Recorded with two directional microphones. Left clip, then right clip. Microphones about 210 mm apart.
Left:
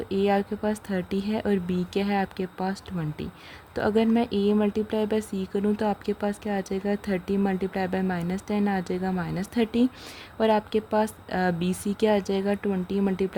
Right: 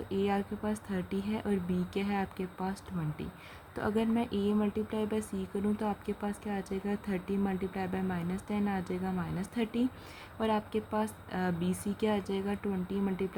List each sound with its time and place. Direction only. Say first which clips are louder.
0.1 s speech: left 8 dB; 35° left (ahead or behind)
3.8 s speech: left 9 dB; 30° left (ahead or behind)